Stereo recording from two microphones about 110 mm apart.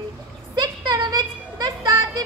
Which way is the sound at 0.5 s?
40° right (ahead or behind).